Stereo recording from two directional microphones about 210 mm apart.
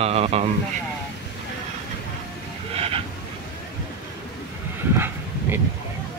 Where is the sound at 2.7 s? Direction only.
30° right (ahead or behind).